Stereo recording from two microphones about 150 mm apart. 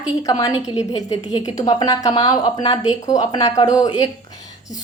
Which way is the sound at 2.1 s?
35° left (ahead or behind).